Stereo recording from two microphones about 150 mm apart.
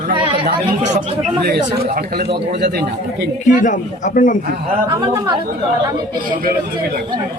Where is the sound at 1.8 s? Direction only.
85° right.